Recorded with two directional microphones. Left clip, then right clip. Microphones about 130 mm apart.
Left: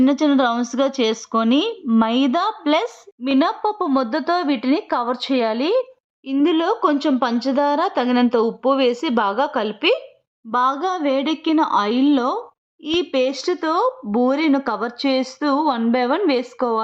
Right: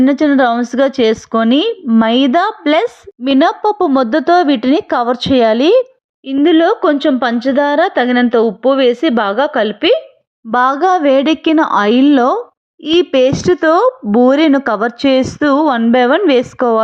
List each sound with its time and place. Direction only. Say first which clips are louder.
0.0 s speech: right 6 dB; 25° right (ahead or behind)
6.2 s speech: right 8 dB; 25° right (ahead or behind)
10.5 s speech: right 8 dB; 40° right (ahead or behind)